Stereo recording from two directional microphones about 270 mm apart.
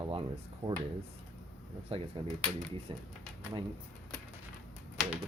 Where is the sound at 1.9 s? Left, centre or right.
Centre.